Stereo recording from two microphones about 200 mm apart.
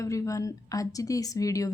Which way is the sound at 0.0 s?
15° left (ahead or behind).